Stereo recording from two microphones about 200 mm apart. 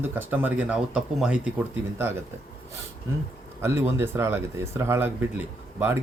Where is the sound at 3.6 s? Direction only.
10° right (ahead or behind).